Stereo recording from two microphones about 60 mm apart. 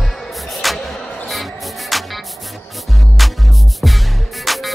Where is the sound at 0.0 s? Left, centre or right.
Centre.